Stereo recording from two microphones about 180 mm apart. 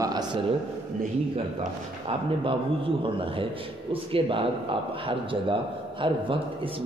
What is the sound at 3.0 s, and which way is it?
A man's voice, 30° right (ahead or behind).